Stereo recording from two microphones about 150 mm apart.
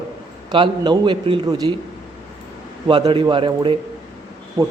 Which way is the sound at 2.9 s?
30° right (ahead or behind).